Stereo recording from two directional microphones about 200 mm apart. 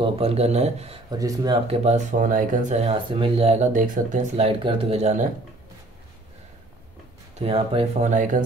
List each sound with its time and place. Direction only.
0.0 s speech: 30° right (ahead or behind)
1.1 s speech: 20° right (ahead or behind); by 4.5 s 40° right (ahead or behind)
4.5 s speech: 25° right (ahead or behind)
7.3 s speech: 30° right (ahead or behind)